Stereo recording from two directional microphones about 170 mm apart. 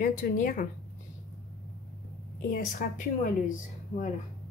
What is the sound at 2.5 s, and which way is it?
A woman's voice, 50° left (ahead or behind).